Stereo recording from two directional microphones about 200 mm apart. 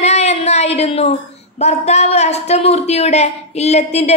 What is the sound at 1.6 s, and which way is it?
Speech, 35° left (ahead or behind).